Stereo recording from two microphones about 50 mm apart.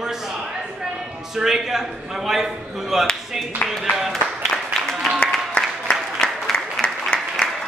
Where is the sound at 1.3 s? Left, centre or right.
Centre.